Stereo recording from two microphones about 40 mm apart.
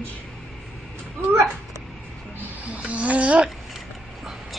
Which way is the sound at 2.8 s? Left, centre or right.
Right.